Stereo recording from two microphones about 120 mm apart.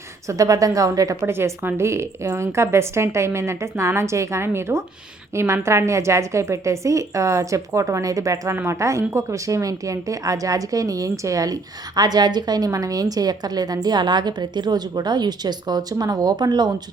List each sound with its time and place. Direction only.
0.3 s a woman's voice: 30° right (ahead or behind)